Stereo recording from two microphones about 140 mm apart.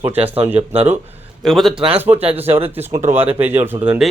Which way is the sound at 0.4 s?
15° right (ahead or behind).